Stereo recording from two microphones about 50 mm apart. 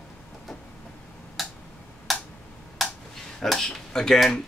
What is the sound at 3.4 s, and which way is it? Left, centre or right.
Speech, centre.